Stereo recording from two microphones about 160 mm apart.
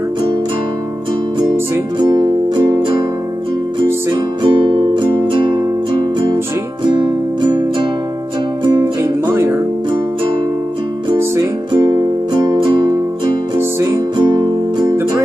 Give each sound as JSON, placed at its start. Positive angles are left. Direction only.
{"t": 2.0, "sound": "music", "side_deg": -30}
{"t": 4.4, "sound": "music", "side_deg": -30}
{"t": 6.9, "sound": "music", "side_deg": -30}
{"t": 9.0, "sound": "music", "side_deg": -15}
{"t": 13.6, "sound": "music", "side_deg": -20}